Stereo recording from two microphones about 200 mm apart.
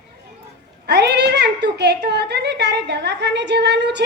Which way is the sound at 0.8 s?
55° right (ahead or behind).